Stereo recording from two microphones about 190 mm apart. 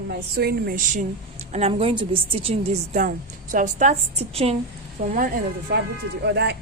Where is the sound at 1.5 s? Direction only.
30° right (ahead or behind).